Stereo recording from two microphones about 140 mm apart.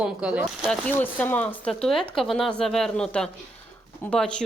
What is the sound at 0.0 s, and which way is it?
Speech, 5° right (ahead or behind).